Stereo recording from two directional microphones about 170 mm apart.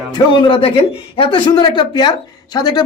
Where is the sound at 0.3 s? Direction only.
30° left (ahead or behind).